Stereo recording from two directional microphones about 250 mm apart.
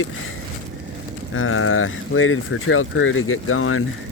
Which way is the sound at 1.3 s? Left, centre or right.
Left.